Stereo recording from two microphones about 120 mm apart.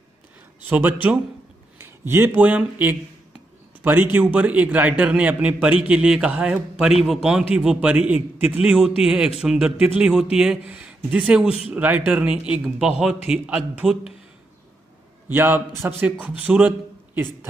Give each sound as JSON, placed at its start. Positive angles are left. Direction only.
{"t": 0.7, "sound": "a man's voice", "side_deg": -15}
{"t": 15.2, "sound": "a man's voice", "side_deg": -15}